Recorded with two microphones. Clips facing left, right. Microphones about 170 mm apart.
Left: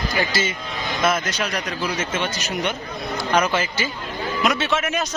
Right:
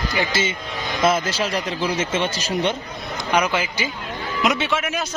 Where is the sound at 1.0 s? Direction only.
30° right (ahead or behind).